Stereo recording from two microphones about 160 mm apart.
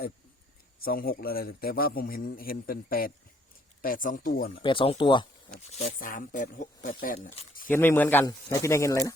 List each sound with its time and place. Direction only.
0.8 s a man's voice: 65° left (ahead or behind)
4.6 s speech: 35° left (ahead or behind)
5.5 s speech: 45° left (ahead or behind)
6.0 s a man's voice: 55° left (ahead or behind)
7.7 s speech: 10° left (ahead or behind)